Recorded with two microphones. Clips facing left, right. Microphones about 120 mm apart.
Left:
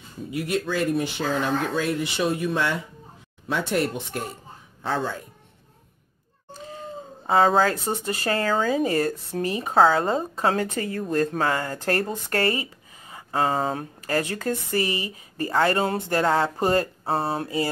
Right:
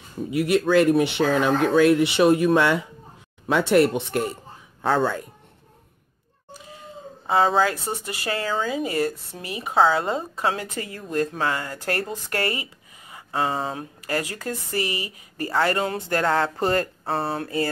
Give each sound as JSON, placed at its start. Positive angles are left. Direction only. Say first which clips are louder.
{"t": 0.4, "sound": "speech", "louder": "right 7 dB", "side_deg": -70}
{"t": 4.8, "sound": "speech", "louder": "right 5 dB", "side_deg": -55}
{"t": 6.6, "sound": "cat", "louder": "left 5 dB", "side_deg": 35}
{"t": 8.0, "sound": "speech", "louder": "left 3 dB", "side_deg": 35}
{"t": 16.5, "sound": "speech", "louder": "left 1 dB", "side_deg": 15}
{"t": 16.8, "sound": "a sound", "louder": "left 1 dB", "side_deg": 30}
{"t": 17.4, "sound": "speech", "louder": "right 1 dB", "side_deg": 20}